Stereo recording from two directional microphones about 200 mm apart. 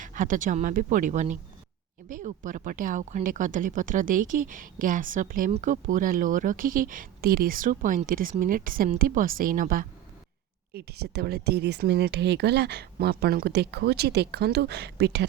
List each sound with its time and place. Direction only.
0.0 s speech: 40° right (ahead or behind); by 15.3 s 60° right (ahead or behind)